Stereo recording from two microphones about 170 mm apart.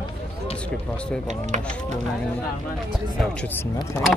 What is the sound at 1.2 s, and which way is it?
Speech, 45° right (ahead or behind).